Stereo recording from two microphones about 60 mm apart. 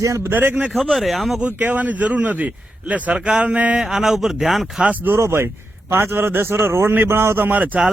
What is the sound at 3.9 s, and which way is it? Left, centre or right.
Speech, centre.